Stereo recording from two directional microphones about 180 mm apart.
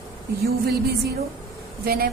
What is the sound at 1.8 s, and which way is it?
Speech, 60° right (ahead or behind).